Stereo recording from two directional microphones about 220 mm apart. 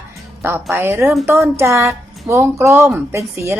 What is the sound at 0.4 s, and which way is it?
Speech, 10° right (ahead or behind).